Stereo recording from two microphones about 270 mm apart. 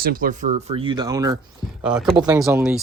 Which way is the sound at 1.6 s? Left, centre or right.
Centre.